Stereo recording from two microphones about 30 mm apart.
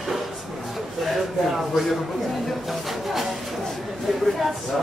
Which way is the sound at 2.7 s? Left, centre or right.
Centre.